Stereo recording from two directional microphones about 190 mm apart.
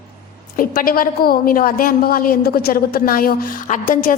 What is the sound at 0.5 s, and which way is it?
A woman's voice, 50° left (ahead or behind).